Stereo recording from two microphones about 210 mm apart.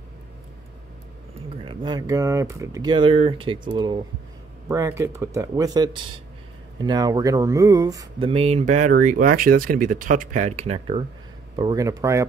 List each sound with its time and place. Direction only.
1.6 s speech: 25° right (ahead or behind)
8.3 s speech: 30° right (ahead or behind); by 12.3 s 15° right (ahead or behind)